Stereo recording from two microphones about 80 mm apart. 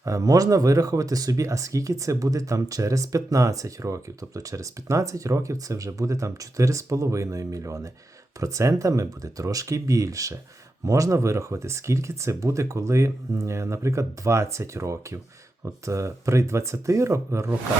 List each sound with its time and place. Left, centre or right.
0.0 s speech: right